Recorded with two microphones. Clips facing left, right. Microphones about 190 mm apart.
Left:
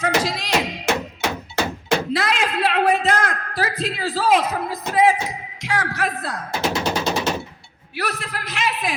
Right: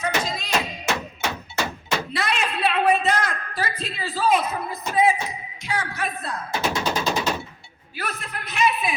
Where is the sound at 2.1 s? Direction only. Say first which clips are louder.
Left 4 dB; 90° left.